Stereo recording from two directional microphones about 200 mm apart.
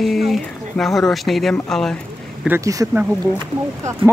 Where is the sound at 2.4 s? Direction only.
10° right (ahead or behind).